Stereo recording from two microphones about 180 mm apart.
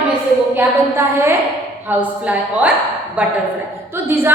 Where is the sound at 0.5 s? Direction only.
15° right (ahead or behind).